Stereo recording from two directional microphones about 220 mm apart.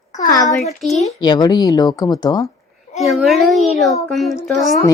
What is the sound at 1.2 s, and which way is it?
Speech, 20° left (ahead or behind).